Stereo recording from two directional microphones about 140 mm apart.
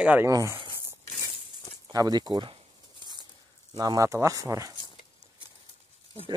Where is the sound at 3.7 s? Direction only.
25° right (ahead or behind).